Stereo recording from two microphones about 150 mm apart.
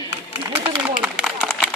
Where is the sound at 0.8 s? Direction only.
5° right (ahead or behind).